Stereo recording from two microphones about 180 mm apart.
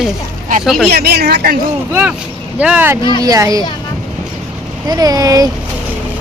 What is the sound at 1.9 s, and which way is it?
Speech, 5° right (ahead or behind).